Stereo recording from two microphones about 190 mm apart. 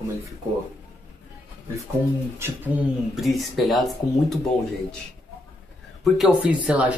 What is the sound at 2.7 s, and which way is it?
Speech, 10° right (ahead or behind).